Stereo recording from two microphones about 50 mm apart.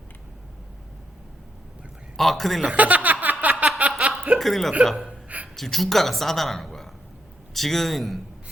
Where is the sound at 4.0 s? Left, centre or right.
Right.